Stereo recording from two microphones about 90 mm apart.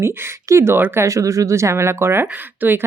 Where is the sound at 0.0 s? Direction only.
30° right (ahead or behind).